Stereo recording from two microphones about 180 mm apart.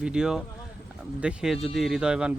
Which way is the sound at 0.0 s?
5° right (ahead or behind).